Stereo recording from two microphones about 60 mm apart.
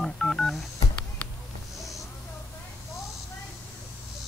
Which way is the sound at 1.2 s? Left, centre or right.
Centre.